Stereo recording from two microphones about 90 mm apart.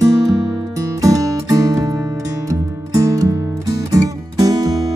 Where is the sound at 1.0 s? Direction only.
40° right (ahead or behind).